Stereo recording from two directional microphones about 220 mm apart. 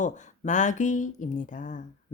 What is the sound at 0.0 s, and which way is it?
Speech, 35° left (ahead or behind).